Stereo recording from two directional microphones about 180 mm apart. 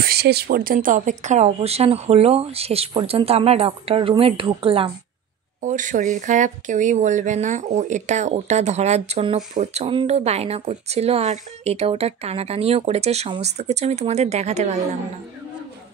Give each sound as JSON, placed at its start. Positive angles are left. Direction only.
{"t": 0.0, "sound": "speech", "side_deg": -60}
{"t": 5.6, "sound": "speech", "side_deg": -45}